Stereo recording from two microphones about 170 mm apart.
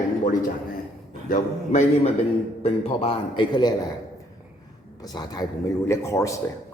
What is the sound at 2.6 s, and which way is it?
A man's voice, 40° left (ahead or behind).